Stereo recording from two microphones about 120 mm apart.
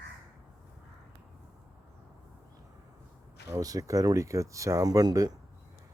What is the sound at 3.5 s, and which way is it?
Speech, 30° right (ahead or behind).